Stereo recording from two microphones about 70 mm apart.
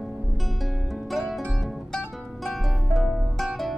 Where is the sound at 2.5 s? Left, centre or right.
Centre.